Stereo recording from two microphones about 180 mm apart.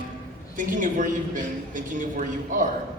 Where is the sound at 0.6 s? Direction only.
45° right (ahead or behind).